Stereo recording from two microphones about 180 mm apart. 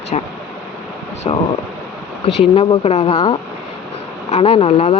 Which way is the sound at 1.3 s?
35° left (ahead or behind).